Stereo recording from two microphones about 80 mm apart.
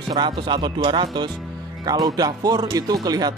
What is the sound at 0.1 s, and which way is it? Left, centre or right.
Speech, right.